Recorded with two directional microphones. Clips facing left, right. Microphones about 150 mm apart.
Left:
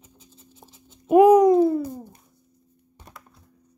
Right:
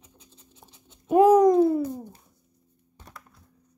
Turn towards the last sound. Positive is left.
turn(degrees=20)  # may be behind; listen again after turning